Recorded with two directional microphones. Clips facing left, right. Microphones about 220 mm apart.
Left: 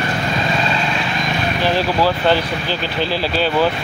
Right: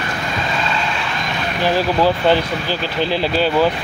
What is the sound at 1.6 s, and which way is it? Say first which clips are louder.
Speech: right 2 dB; 15° right (ahead or behind).